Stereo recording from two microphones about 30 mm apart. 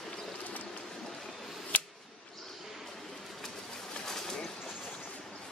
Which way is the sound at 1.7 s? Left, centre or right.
Left.